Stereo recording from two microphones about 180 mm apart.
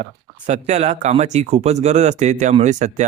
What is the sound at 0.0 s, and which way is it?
Speech, 40° right (ahead or behind).